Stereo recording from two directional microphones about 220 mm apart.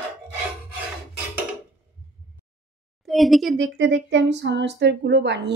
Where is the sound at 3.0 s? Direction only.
Centre (ahead or behind).